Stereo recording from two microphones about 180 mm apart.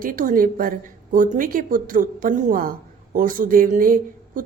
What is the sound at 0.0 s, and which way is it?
A woman's voice, 50° right (ahead or behind).